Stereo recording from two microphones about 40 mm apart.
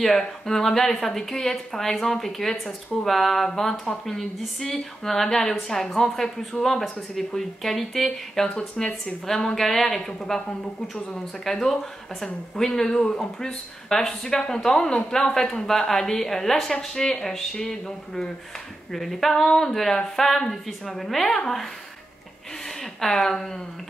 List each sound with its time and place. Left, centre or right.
0.0 s speech: centre
8.5 s speech: left
9.0 s speech: centre
22.9 s speech: centre